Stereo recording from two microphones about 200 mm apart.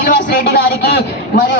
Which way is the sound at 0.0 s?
50° left (ahead or behind).